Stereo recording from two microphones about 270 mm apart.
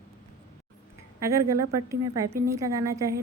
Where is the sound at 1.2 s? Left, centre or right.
Centre.